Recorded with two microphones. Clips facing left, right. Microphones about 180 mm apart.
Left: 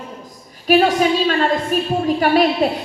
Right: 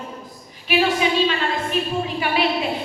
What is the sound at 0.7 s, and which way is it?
A woman's voice, 45° left (ahead or behind).